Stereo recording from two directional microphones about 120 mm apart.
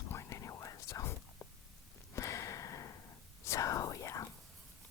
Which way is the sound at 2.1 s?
25° left (ahead or behind).